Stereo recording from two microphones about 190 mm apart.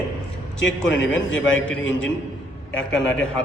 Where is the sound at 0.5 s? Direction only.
75° left (ahead or behind).